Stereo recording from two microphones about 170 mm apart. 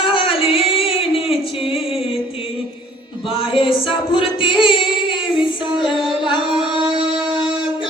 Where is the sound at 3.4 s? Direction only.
30° left (ahead or behind).